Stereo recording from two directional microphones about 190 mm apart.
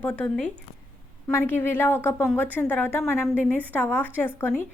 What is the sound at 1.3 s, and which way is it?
A woman's voice, 10° left (ahead or behind).